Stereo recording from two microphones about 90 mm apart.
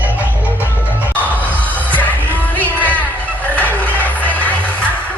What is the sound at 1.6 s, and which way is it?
Music, 20° left (ahead or behind).